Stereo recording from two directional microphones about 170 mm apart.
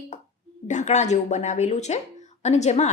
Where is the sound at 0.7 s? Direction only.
45° left (ahead or behind).